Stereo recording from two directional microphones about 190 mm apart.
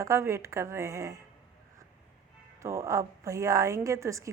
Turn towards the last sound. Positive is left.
turn(degrees=-15)  # may be behind; listen again after turning